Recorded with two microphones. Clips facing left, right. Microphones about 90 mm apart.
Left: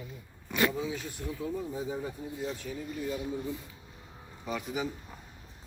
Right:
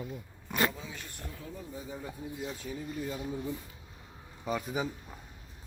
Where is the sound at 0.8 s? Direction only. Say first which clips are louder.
Left 9 dB; 10° left (ahead or behind).